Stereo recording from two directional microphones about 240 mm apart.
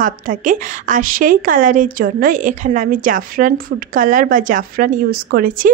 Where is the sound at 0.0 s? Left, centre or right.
Right.